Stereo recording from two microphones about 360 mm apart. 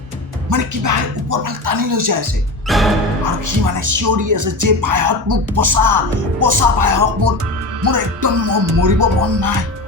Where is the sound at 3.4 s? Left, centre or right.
Right.